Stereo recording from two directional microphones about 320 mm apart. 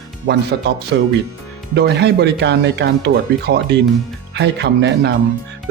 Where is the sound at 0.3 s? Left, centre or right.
Right.